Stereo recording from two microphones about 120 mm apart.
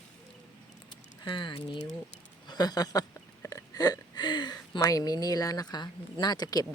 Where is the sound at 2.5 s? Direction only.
35° left (ahead or behind).